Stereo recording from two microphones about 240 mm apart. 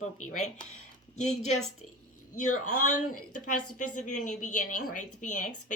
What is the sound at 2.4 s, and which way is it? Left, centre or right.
Speech, left.